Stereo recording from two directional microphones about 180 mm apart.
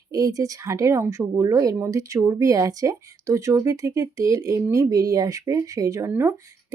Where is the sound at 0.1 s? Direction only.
20° right (ahead or behind).